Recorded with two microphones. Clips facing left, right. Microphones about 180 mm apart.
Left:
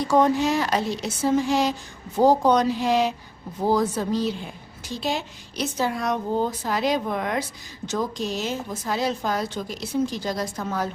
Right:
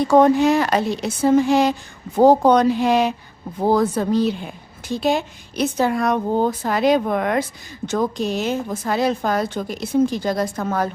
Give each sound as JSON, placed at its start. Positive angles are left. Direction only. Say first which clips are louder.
{"t": 0.1, "sound": "a woman's voice", "louder": "right 6 dB", "side_deg": -55}